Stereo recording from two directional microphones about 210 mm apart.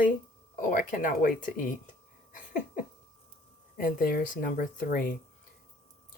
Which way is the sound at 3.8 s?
40° left (ahead or behind).